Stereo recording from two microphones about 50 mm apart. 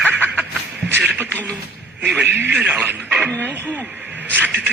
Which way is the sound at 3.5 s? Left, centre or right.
Left.